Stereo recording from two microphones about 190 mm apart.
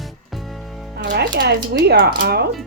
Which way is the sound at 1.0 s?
65° right (ahead or behind).